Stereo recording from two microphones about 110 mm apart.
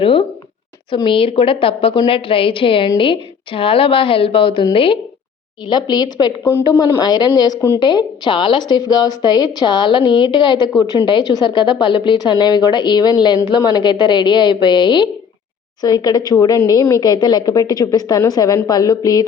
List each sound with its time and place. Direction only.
0.0 s a woman's voice: 55° left (ahead or behind)
5.6 s a woman's voice: 40° left (ahead or behind)